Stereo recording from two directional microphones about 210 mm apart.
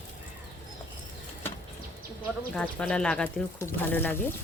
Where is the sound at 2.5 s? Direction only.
5° left (ahead or behind).